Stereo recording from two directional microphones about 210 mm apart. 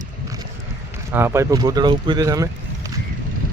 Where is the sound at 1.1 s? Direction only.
10° right (ahead or behind).